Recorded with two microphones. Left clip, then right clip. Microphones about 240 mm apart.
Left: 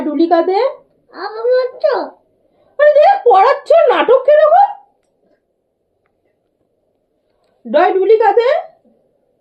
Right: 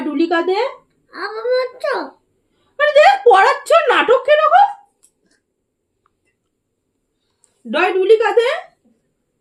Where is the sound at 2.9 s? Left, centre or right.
Right.